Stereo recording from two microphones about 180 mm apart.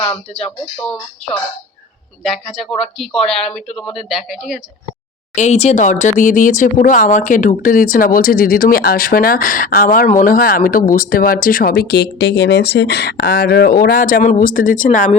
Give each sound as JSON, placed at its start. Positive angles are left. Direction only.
{"t": 0.3, "sound": "a woman's voice", "side_deg": 5}
{"t": 5.3, "sound": "speech", "side_deg": 40}